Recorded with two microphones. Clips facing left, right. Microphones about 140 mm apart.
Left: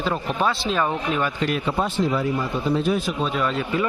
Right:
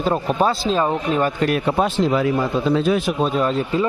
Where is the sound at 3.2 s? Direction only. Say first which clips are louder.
Right 4 dB; 35° right (ahead or behind).